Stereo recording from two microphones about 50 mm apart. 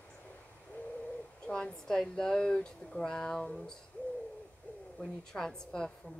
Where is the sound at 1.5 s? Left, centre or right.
Centre.